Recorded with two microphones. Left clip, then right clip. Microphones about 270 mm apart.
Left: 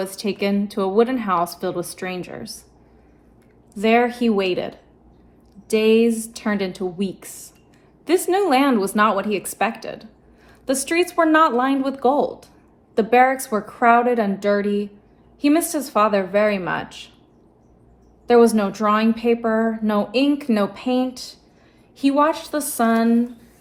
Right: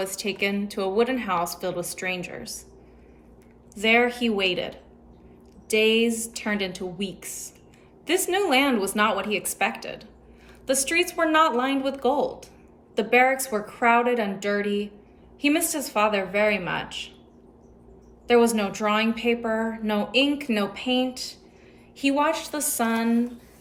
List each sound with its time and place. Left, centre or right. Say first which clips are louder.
0.0 s a woman's voice: left 3 dB; centre
3.8 s a woman's voice: left 3 dB; centre
18.3 s a woman's voice: left 5 dB; centre